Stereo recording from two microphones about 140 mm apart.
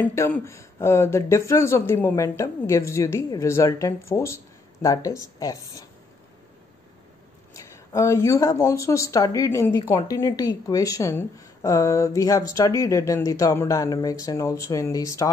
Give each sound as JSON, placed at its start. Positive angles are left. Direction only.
{"t": 0.0, "sound": "speech", "side_deg": 20}
{"t": 7.5, "sound": "speech", "side_deg": 20}